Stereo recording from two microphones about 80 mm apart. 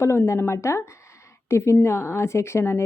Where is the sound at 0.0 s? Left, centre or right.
Left.